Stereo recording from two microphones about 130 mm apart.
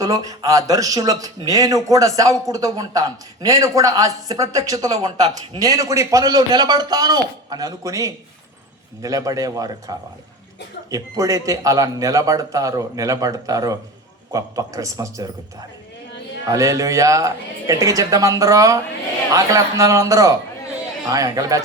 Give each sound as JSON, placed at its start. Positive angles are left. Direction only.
{"t": 0.0, "sound": "speech", "side_deg": -25}
{"t": 10.9, "sound": "speech", "side_deg": -25}
{"t": 16.5, "sound": "speech", "side_deg": -25}